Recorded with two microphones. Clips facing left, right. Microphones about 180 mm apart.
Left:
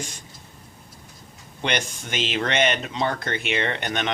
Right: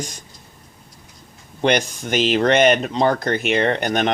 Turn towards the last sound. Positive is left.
turn(degrees=-40)  # may be behind; listen again after turning